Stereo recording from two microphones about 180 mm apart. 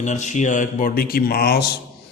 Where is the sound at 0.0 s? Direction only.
40° left (ahead or behind).